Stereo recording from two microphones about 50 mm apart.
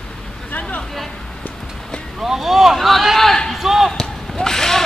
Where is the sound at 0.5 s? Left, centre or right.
Left.